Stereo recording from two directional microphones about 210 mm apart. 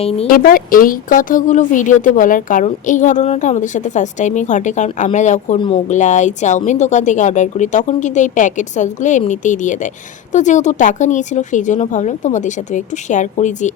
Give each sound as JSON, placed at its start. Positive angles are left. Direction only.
{"t": 0.3, "sound": "a woman's voice", "side_deg": 40}